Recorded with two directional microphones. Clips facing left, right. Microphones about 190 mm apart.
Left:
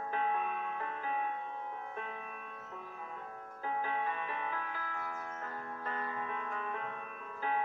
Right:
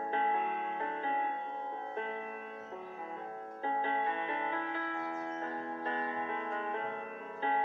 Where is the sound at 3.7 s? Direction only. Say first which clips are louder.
Right 2 dB; 25° right (ahead or behind).